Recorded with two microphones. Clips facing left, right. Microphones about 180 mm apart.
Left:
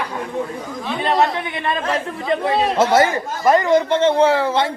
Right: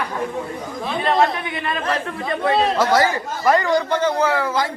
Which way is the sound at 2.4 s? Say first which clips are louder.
Right 1 dB; 25° left (ahead or behind).